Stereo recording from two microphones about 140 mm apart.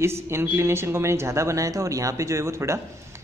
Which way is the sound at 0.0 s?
20° right (ahead or behind).